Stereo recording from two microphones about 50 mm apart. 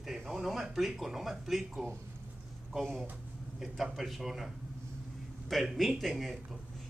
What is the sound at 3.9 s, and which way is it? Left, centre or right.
Speech, centre.